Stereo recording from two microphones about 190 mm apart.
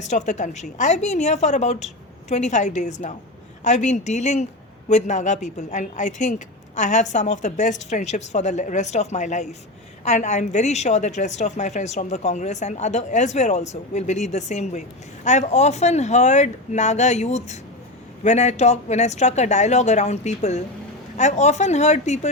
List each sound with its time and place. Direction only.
0.0 s a woman's voice: 40° left (ahead or behind)